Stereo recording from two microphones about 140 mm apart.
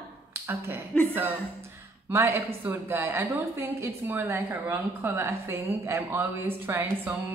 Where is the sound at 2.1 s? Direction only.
20° right (ahead or behind).